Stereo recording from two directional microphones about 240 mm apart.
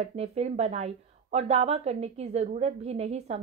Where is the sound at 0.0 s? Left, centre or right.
Right.